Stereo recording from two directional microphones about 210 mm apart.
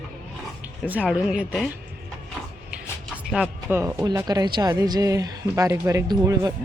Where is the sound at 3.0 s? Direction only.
Centre (ahead or behind).